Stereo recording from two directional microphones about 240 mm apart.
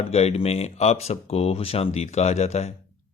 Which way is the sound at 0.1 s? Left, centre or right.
Left.